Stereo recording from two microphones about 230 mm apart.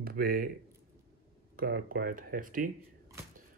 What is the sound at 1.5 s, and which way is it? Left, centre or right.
Speech, right.